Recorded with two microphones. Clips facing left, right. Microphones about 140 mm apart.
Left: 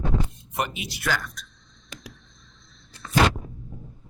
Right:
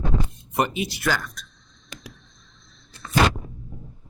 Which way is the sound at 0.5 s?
40° right (ahead or behind).